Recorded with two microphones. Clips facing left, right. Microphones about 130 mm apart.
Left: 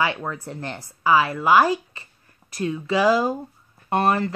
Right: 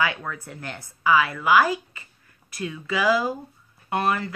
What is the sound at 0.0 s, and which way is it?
Speech, 30° left (ahead or behind).